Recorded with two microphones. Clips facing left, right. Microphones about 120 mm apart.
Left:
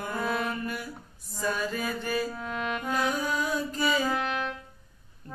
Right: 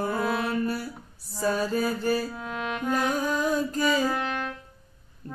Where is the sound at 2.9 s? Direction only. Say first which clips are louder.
Right 3 dB; 45° right (ahead or behind).